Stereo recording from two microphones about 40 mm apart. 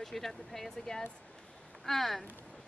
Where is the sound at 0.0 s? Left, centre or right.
Centre.